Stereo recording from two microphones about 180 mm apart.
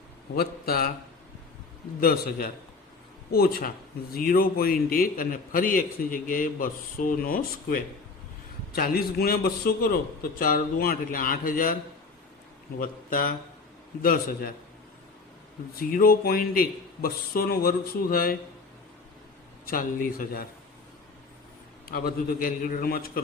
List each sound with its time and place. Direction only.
0.3 s a man's voice: 60° left (ahead or behind)
2.0 s a man's voice: 55° left (ahead or behind)
12.8 s a man's voice: 50° left (ahead or behind)
15.7 s a man's voice: 55° left (ahead or behind)
19.6 s a man's voice: 50° left (ahead or behind)
21.8 s a man's voice: 55° left (ahead or behind)